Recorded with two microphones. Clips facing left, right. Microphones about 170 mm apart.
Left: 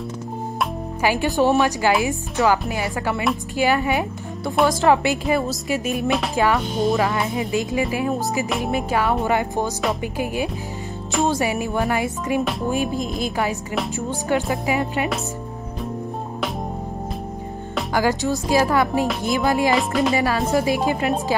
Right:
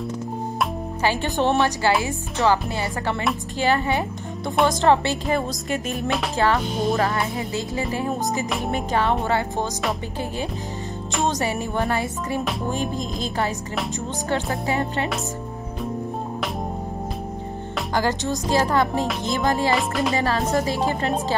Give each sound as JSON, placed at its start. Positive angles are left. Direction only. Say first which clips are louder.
{"t": 1.0, "sound": "music", "louder": "left 3 dB", "side_deg": 10}
{"t": 1.6, "sound": "music", "louder": "left 2 dB", "side_deg": 15}
{"t": 6.6, "sound": "music", "louder": "left 2 dB", "side_deg": 0}
{"t": 7.3, "sound": "music", "louder": "left 4 dB", "side_deg": 15}
{"t": 8.1, "sound": "music", "louder": "left 2 dB", "side_deg": 0}
{"t": 18.5, "sound": "music", "louder": "left 2 dB", "side_deg": 10}
{"t": 19.7, "sound": "music", "louder": "left 3 dB", "side_deg": 0}
{"t": 20.2, "sound": "music", "louder": "left 2 dB", "side_deg": 10}